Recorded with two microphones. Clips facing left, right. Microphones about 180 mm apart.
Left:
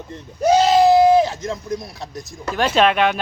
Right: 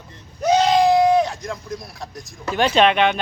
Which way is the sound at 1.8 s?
Centre (ahead or behind).